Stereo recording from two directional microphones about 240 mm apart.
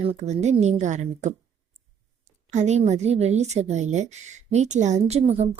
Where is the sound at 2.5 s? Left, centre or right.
Right.